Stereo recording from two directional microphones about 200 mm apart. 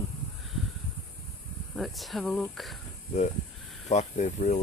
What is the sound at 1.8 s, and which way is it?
Speech, centre (ahead or behind).